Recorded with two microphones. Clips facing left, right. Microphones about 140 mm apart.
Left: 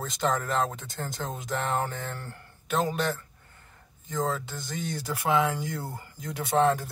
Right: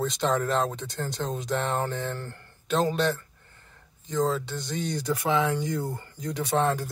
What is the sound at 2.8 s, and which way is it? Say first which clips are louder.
Speech: right 3 dB; centre (ahead or behind).